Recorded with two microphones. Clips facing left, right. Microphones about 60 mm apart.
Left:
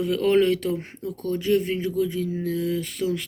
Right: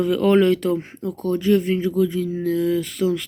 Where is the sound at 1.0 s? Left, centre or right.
Right.